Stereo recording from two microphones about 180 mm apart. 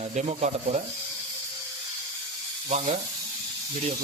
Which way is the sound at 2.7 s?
40° right (ahead or behind).